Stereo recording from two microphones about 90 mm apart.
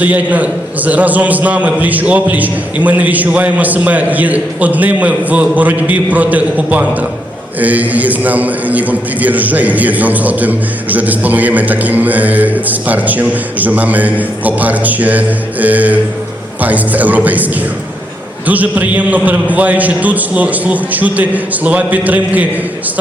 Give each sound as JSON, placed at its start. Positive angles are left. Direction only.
{"t": 0.0, "sound": "a man's voice", "side_deg": -15}